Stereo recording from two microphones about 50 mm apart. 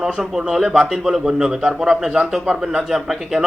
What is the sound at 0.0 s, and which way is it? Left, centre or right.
A man's voice, centre.